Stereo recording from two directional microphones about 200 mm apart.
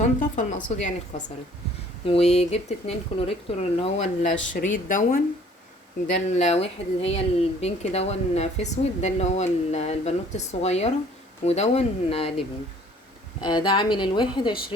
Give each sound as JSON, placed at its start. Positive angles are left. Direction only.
{"t": 0.0, "sound": "a woman's voice", "side_deg": 40}